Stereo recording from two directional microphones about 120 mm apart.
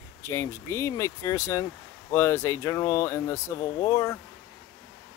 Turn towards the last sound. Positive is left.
turn(degrees=25)  # may be behind; listen again after turning